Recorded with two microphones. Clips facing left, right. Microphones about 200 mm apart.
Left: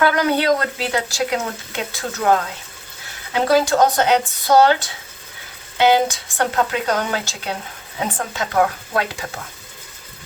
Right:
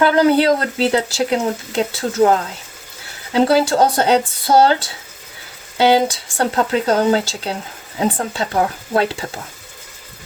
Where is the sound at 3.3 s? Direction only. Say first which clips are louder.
Right 2 dB; 30° right (ahead or behind).